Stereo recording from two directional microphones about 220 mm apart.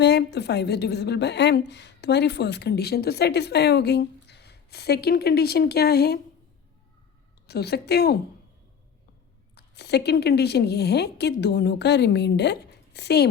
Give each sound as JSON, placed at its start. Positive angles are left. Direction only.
{"t": 0.0, "sound": "a woman's voice", "side_deg": 50}
{"t": 7.4, "sound": "a woman's voice", "side_deg": 45}
{"t": 9.6, "sound": "a woman's voice", "side_deg": 50}